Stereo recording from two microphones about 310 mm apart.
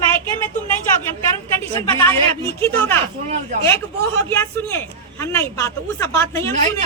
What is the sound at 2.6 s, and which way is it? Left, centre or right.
Speech, centre.